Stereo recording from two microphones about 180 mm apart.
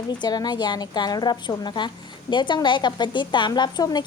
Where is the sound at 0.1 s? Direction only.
25° left (ahead or behind).